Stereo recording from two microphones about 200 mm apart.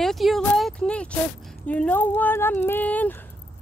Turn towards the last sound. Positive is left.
turn(degrees=10)  # may be behind; listen again after turning